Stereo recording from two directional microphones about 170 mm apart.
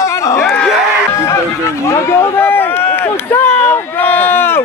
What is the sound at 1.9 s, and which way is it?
Run, 15° left (ahead or behind).